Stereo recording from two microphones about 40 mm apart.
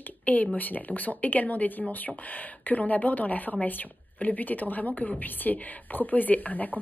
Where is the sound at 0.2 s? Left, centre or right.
Left.